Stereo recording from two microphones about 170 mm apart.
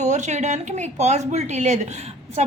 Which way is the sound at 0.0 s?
45° right (ahead or behind).